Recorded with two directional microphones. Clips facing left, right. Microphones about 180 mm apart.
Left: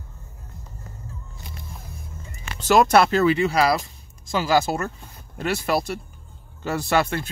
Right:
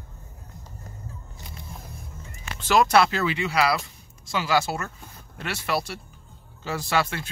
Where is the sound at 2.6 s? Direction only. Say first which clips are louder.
Left 3 dB; 45° left (ahead or behind).